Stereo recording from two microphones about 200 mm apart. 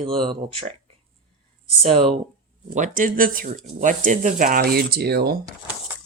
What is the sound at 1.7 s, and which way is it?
Speech, 25° right (ahead or behind).